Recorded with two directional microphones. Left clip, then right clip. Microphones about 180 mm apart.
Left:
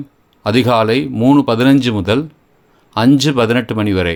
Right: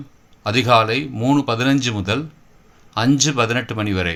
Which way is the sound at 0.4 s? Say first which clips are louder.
Left 2 dB; 50° left (ahead or behind).